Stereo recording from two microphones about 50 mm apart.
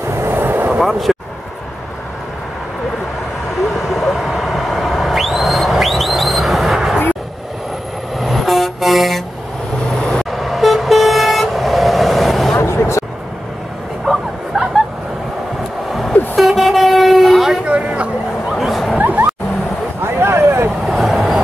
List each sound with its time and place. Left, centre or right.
0.1 s vehicle: right
0.7 s speech: centre
3.9 s a sound: centre
8.2 s vehicle: centre
9.9 s vehicle: centre
10.3 s vehicle: centre
12.5 s vehicle: left
14.0 s bow-wow: centre
16.3 s vehicle: centre
17.6 s a sound: right
18.5 s a sound: centre
18.9 s hubbub: right
20.0 s a sound: right
20.8 s vehicle: centre